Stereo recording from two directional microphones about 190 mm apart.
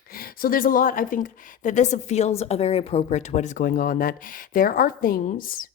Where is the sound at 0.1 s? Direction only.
50° left (ahead or behind).